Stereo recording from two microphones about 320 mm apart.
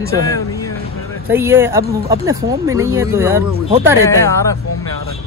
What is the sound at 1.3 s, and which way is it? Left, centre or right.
Speech, centre.